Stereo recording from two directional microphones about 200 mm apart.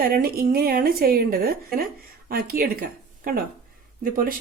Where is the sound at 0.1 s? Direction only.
50° right (ahead or behind).